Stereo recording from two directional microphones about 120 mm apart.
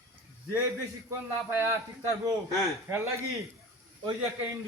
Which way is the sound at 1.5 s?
20° right (ahead or behind).